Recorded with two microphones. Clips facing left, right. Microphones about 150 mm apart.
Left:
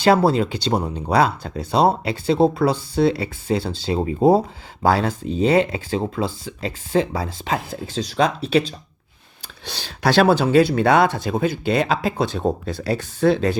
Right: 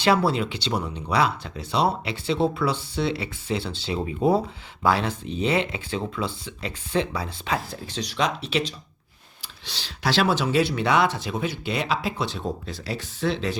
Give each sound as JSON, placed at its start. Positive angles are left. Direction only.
{"t": 0.0, "sound": "speech", "side_deg": 45}
{"t": 7.5, "sound": "speech", "side_deg": 30}
{"t": 9.6, "sound": "speech", "side_deg": 50}